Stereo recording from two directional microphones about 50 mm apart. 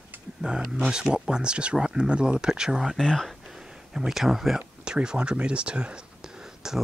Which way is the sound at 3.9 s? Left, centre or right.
Centre.